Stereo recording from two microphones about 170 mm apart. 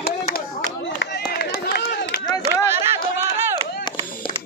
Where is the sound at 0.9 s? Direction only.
75° left (ahead or behind).